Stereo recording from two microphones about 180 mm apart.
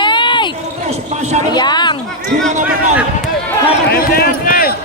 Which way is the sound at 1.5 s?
25° left (ahead or behind).